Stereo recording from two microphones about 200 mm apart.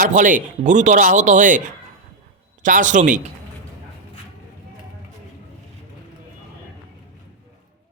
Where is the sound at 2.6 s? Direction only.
40° right (ahead or behind).